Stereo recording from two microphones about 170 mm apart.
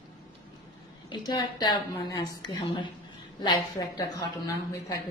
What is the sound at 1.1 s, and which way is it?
A woman's voice, 25° left (ahead or behind).